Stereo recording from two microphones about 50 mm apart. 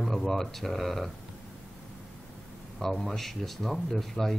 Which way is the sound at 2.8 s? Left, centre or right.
Centre.